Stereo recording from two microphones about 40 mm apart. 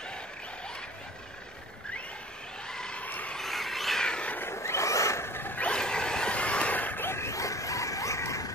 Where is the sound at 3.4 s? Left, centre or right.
Centre.